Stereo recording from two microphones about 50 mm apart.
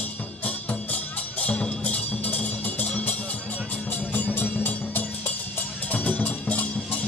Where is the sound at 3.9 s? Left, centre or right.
Left.